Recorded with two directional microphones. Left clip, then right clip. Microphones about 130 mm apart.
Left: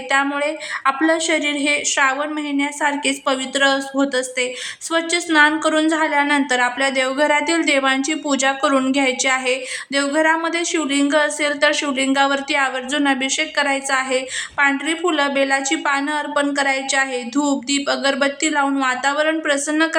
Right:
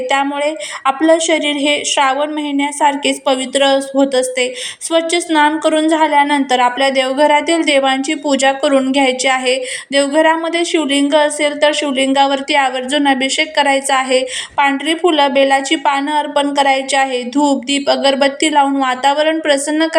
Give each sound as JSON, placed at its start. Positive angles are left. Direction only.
{"t": 0.1, "sound": "a woman's voice", "side_deg": -10}